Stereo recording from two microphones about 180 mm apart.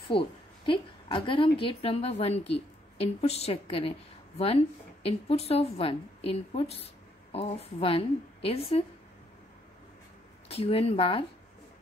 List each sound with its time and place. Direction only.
0.1 s a woman's voice: 30° left (ahead or behind)
10.5 s a woman's voice: 35° left (ahead or behind)